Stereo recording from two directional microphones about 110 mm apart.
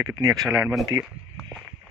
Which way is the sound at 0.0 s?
35° right (ahead or behind).